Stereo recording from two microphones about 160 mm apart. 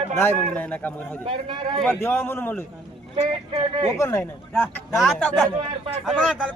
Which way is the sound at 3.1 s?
35° right (ahead or behind).